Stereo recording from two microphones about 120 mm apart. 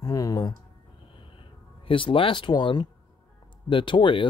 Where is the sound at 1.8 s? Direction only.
45° left (ahead or behind).